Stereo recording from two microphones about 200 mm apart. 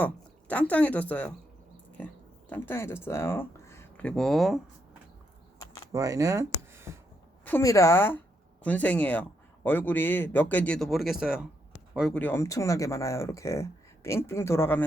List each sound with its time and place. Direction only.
0.0 s speech: 5° left (ahead or behind)
2.5 s speech: 10° left (ahead or behind)
5.5 s a sound: 20° left (ahead or behind)
5.9 s speech: 15° right (ahead or behind)
7.4 s speech: 15° left (ahead or behind)